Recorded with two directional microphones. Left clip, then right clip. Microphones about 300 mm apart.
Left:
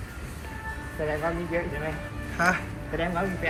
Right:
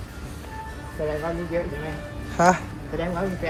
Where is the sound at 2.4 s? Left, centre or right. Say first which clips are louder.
Right 6 dB; centre.